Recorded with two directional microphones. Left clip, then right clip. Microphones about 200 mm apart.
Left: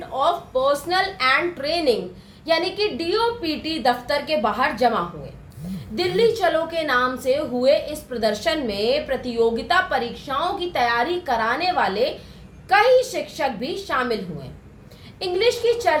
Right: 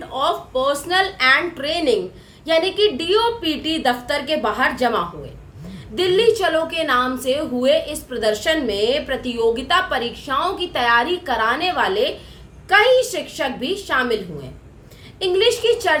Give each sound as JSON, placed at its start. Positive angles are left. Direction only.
{"t": 0.2, "sound": "a woman's voice", "side_deg": -20}
{"t": 6.0, "sound": "a woman's voice", "side_deg": -20}
{"t": 15.2, "sound": "a woman's voice", "side_deg": -20}